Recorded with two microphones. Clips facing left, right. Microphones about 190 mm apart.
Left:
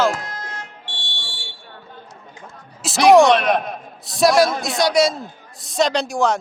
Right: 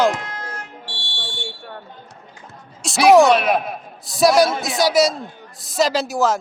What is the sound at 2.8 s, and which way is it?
Speech, centre (ahead or behind).